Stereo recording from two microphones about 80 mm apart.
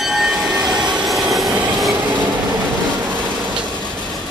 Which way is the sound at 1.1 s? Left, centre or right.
Centre.